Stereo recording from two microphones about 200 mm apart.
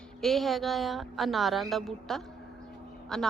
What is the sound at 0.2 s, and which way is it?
A woman's voice, centre (ahead or behind).